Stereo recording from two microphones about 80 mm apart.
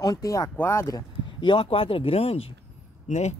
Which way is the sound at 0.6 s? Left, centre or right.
Left.